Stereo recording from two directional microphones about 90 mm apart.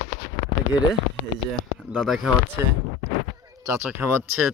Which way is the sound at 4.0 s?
25° right (ahead or behind).